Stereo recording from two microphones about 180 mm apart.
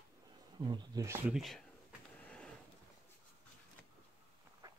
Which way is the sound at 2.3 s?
5° left (ahead or behind).